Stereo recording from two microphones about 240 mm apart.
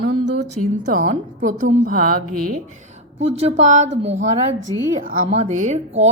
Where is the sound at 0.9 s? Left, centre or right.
Right.